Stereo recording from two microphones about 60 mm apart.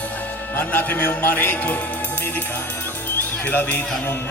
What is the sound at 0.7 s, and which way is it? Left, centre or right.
A man's voice, left.